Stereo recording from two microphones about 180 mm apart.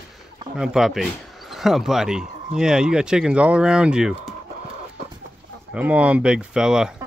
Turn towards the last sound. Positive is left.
turn(degrees=-5)  # may be behind; listen again after turning